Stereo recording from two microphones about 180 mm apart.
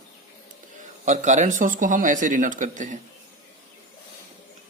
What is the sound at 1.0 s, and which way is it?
Speech, 40° right (ahead or behind).